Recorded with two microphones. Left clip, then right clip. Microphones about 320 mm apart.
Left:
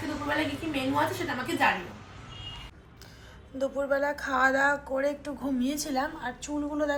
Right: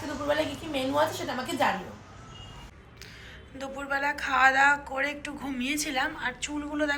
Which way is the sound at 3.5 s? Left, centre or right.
Centre.